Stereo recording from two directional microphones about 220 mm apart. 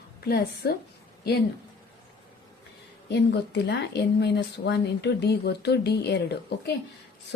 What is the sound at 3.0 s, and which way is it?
Speech, 50° left (ahead or behind).